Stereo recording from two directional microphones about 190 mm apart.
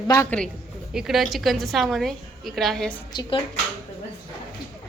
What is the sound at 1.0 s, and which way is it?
A woman's voice, centre (ahead or behind).